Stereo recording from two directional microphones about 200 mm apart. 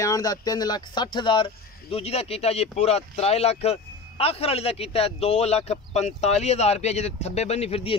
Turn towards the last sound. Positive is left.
turn(degrees=30)  # may be behind; listen again after turning